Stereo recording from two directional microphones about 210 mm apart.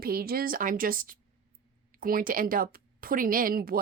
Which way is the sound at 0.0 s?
45° right (ahead or behind).